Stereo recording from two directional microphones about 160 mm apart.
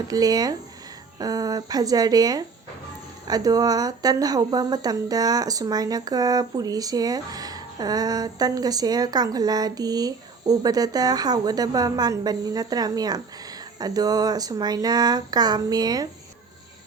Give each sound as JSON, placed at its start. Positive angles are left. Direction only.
{"t": 0.1, "sound": "speech", "side_deg": -25}